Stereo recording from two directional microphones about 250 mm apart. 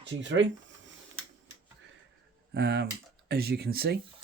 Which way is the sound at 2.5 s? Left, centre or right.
Right.